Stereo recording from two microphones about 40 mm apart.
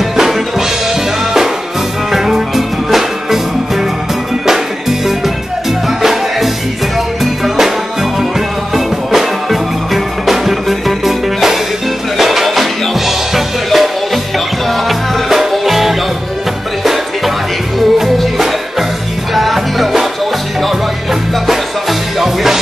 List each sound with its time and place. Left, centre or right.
0.1 s music: centre
2.1 s music: centre
8.7 s music: centre
17.7 s music: centre